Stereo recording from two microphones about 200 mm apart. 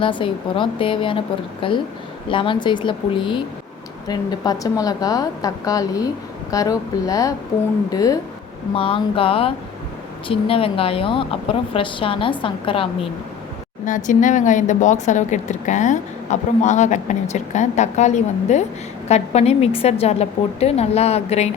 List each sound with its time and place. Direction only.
0.0 s a woman's voice: 25° left (ahead or behind)
13.8 s speech: 40° left (ahead or behind)